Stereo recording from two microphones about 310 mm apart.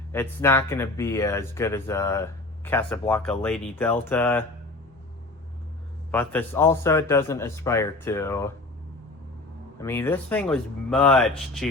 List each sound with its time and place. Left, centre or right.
0.1 s speech: centre
6.1 s speech: centre
9.7 s speech: centre